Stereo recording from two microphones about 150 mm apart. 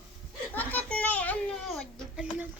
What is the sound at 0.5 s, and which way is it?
Children playing, 10° left (ahead or behind).